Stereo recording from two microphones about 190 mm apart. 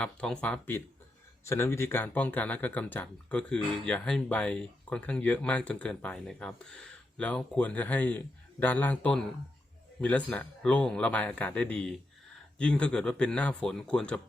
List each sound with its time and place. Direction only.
0.0 s speech: 5° left (ahead or behind)